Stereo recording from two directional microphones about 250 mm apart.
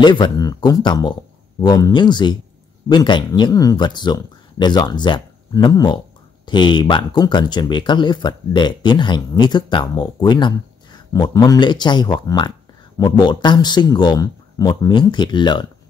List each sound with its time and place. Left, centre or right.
0.0 s speech: centre